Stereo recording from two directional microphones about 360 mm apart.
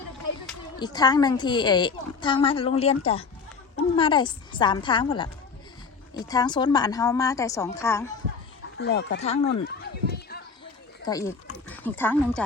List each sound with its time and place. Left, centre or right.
0.8 s a woman's voice: centre
8.8 s speech: left
9.2 s a sound: left
11.0 s speech: centre